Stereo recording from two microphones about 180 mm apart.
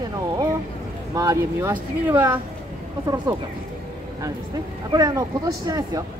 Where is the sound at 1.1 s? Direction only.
20° right (ahead or behind).